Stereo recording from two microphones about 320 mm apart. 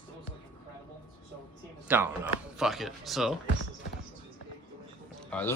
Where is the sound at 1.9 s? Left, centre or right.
Centre.